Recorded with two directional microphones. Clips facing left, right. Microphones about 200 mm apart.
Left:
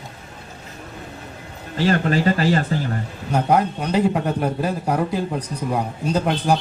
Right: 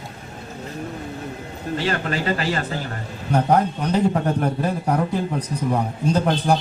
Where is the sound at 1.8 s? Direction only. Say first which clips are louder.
Left 6 dB; 35° left (ahead or behind).